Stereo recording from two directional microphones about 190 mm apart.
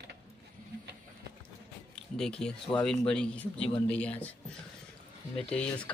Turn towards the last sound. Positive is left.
turn(degrees=5)  # may be behind; listen again after turning